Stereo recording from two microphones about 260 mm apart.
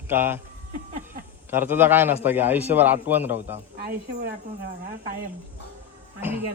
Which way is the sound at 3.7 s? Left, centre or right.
Right.